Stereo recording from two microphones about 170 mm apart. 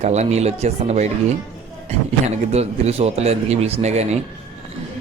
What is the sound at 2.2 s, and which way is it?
A man's voice, 40° right (ahead or behind).